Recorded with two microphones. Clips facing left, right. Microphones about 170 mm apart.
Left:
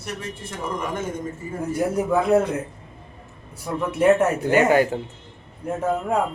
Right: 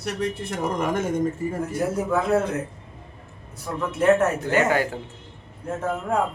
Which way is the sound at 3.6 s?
10° left (ahead or behind).